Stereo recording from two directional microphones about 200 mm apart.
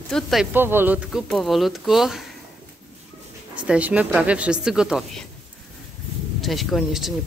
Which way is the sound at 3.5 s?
5° right (ahead or behind).